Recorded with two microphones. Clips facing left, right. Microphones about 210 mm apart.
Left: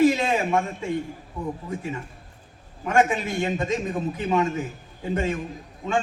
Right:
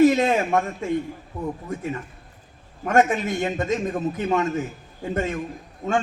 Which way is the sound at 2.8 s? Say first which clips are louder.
Right 2 dB; 50° right (ahead or behind).